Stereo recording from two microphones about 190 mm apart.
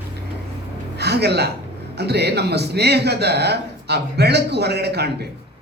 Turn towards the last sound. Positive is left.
turn(degrees=-60)  # may be behind; listen again after turning